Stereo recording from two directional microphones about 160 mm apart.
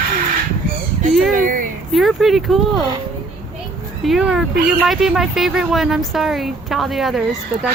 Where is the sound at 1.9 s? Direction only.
Centre (ahead or behind).